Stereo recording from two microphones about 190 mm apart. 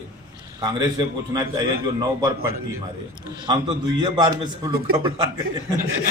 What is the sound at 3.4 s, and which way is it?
Speech, 25° right (ahead or behind).